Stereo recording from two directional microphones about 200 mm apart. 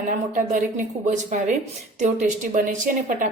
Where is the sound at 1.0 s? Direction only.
35° right (ahead or behind).